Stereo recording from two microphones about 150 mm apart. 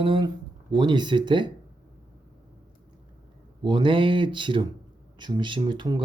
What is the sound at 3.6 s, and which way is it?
Speech, 35° right (ahead or behind).